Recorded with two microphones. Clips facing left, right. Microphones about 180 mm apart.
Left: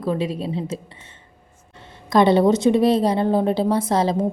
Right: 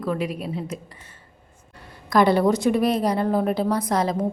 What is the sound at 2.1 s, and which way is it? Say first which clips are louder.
A woman's voice: left 3 dB; 25° left (ahead or behind).